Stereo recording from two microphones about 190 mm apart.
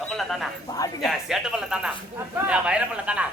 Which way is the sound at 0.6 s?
20° left (ahead or behind).